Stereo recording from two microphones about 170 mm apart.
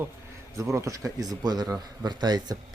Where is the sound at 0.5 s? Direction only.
15° right (ahead or behind).